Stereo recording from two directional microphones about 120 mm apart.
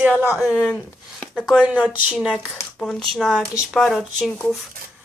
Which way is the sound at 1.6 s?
10° right (ahead or behind).